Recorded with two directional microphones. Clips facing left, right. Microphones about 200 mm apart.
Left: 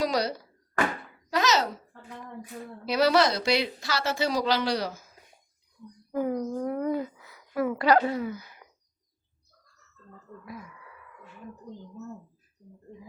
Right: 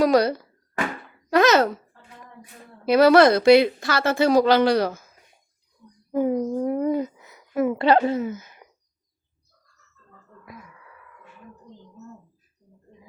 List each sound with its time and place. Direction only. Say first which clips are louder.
0.0 s a woman's voice: right 9 dB; 55° right (ahead or behind)
2.8 s a woman's voice: right 8 dB; 55° right (ahead or behind)
6.1 s a woman's voice: right 6 dB; 20° right (ahead or behind)